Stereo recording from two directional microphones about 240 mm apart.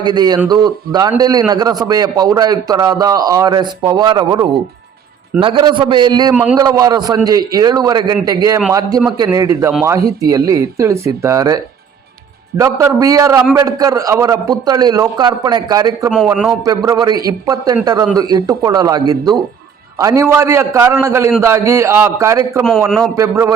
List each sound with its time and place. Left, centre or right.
0.0 s a man's voice: centre
6.3 s a man's voice: centre
6.6 s a man's voice: centre
16.0 s a man's voice: centre
16.6 s a man's voice: centre
22.8 s a man's voice: centre
23.1 s a man's voice: centre